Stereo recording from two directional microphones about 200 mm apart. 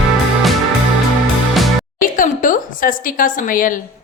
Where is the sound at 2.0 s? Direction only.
45° left (ahead or behind).